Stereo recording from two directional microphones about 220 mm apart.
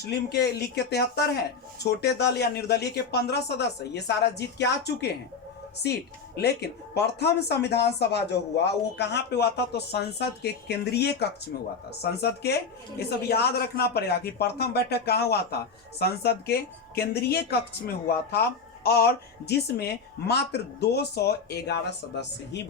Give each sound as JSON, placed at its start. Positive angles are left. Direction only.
{"t": 0.0, "sound": "speech", "side_deg": 50}